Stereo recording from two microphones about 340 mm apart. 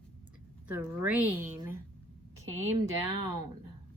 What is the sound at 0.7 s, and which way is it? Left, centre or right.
A woman's voice, centre.